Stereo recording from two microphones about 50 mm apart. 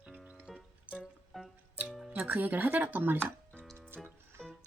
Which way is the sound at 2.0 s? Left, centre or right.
Right.